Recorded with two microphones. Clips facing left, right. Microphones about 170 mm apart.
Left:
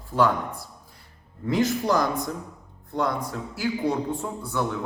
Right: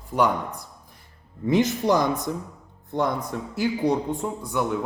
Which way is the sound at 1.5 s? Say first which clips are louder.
Right 2 dB; 20° right (ahead or behind).